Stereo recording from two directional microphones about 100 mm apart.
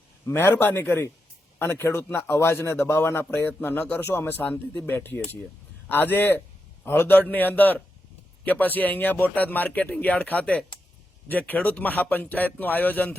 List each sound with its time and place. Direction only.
0.3 s a man's voice: 20° left (ahead or behind)